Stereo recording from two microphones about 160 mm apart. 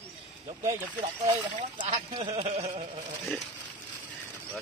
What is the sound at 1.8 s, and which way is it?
Speech, 35° right (ahead or behind).